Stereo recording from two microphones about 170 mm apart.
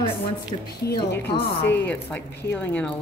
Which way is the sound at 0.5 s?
35° left (ahead or behind).